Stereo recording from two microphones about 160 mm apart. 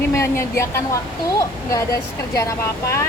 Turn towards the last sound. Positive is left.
turn(degrees=15)  # may be behind; listen again after turning